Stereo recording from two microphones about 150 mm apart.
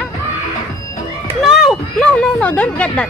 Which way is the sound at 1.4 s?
Centre (ahead or behind).